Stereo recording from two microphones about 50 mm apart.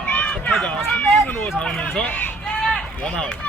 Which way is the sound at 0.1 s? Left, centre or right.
Left.